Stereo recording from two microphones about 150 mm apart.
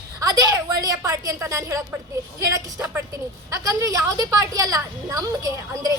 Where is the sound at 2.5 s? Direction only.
15° right (ahead or behind).